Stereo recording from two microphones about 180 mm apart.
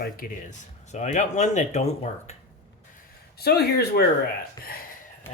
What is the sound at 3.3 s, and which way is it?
Speech, 60° left (ahead or behind).